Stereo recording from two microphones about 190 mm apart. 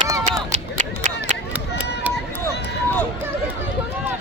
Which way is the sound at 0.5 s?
40° right (ahead or behind).